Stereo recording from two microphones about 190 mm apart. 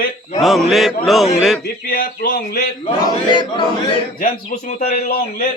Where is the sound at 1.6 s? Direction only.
50° left (ahead or behind).